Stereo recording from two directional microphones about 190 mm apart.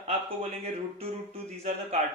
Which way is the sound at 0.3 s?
30° right (ahead or behind).